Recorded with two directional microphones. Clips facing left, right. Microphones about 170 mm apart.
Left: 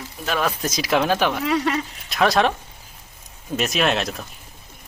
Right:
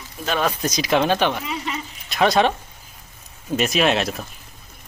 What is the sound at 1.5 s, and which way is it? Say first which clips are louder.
Speech: left 7 dB; 75° left (ahead or behind).